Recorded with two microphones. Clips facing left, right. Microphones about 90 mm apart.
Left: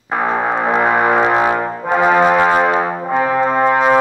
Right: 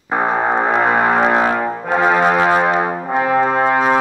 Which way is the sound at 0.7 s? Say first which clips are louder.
Left 3 dB; 5° left (ahead or behind).